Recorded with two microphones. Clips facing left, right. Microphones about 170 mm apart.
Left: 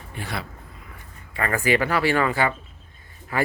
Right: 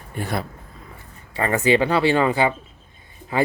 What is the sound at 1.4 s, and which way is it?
Speech, 25° right (ahead or behind).